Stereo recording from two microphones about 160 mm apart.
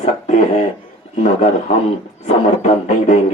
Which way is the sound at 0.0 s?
45° left (ahead or behind).